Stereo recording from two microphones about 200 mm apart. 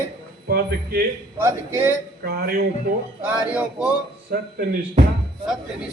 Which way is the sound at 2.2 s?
50° right (ahead or behind).